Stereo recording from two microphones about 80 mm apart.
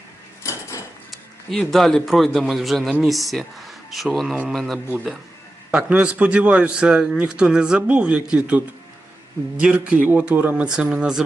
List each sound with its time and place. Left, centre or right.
0.4 s dishes: left
1.5 s speech: centre
5.7 s a man's voice: centre